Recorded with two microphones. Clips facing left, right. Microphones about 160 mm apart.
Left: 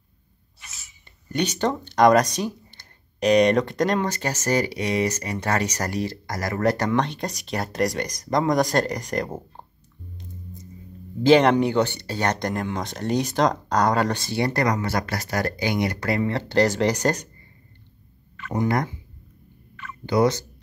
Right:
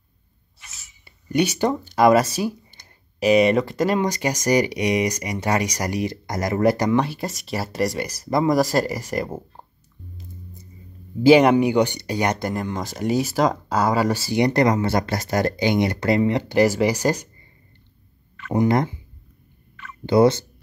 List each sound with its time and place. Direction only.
1.3 s speech: 10° right (ahead or behind)
6.6 s speech: 10° right (ahead or behind)
11.2 s speech: 10° right (ahead or behind)
14.3 s speech: 20° right (ahead or behind)
18.5 s speech: 20° right (ahead or behind)
20.1 s speech: 30° right (ahead or behind)